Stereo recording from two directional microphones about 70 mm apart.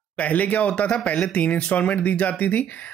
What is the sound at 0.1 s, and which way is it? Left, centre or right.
Speech, left.